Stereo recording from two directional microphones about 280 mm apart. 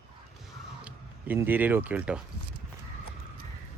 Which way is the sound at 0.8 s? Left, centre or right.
Centre.